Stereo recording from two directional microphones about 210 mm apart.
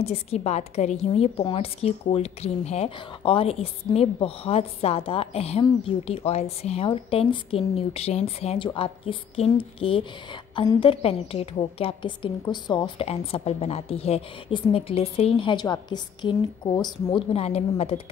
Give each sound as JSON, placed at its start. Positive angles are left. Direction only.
{"t": 0.0, "sound": "a woman's voice", "side_deg": 30}